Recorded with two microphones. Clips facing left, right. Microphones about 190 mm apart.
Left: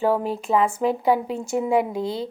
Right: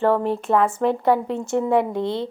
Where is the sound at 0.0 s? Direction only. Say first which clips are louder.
Right 2 dB; 5° left (ahead or behind).